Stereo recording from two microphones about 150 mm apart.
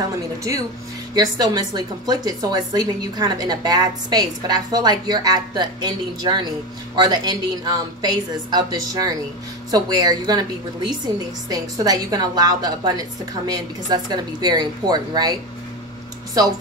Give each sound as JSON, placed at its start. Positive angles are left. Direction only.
{"t": 0.4, "sound": "a woman's voice", "side_deg": -20}